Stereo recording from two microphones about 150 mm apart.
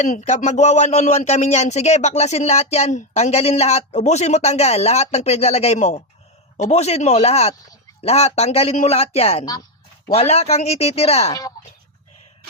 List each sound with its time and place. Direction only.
0.0 s speech: 50° left (ahead or behind)
11.3 s speech: 25° left (ahead or behind)